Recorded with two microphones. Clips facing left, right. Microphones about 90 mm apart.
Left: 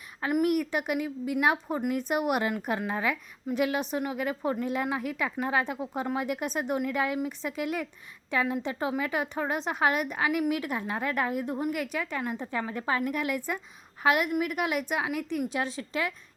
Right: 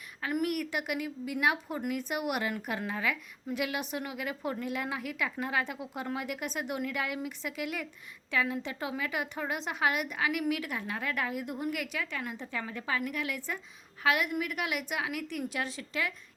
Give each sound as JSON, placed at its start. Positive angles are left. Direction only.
{"t": 0.2, "sound": "a woman's voice", "side_deg": 25}
{"t": 0.7, "sound": "a woman's voice", "side_deg": 35}
{"t": 5.7, "sound": "a woman's voice", "side_deg": 45}